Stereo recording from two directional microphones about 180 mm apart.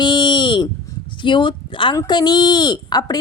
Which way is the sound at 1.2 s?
25° left (ahead or behind).